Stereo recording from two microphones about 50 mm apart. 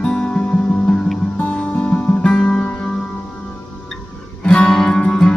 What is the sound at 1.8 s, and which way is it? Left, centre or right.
Music, left.